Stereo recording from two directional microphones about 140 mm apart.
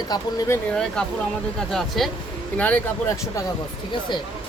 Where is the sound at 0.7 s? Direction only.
5° left (ahead or behind).